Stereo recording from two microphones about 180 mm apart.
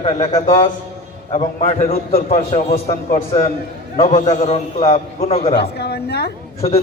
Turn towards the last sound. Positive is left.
turn(degrees=35)  # may be behind; listen again after turning